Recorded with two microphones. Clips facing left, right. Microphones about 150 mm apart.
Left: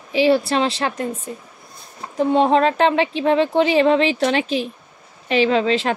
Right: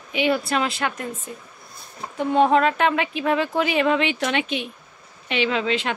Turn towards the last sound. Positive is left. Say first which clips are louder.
# left 6 dB
turn(degrees=35)  # may be behind; listen again after turning